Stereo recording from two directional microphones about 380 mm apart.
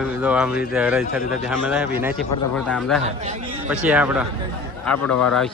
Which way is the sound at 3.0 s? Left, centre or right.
Centre.